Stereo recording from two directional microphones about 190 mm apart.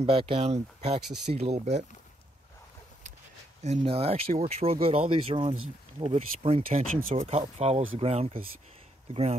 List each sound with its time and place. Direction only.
0.0 s speech: 30° right (ahead or behind)
3.6 s speech: 30° right (ahead or behind)